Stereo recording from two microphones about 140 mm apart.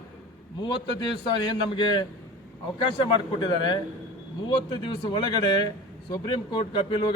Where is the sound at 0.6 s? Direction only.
35° left (ahead or behind).